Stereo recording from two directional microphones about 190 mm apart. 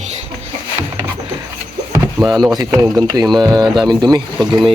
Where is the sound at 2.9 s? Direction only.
20° right (ahead or behind).